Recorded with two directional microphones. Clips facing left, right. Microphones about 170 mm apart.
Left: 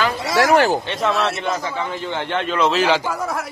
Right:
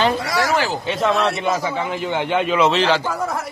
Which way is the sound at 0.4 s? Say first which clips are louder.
Left 7 dB; 60° left (ahead or behind).